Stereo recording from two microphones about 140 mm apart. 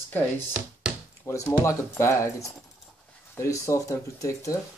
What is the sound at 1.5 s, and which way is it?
Speech, 20° left (ahead or behind).